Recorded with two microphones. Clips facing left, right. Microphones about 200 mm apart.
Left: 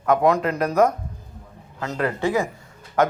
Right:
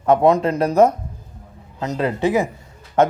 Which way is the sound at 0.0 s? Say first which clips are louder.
Right 4 dB; 25° right (ahead or behind).